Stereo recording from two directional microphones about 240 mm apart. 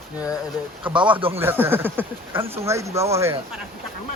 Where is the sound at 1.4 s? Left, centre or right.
Centre.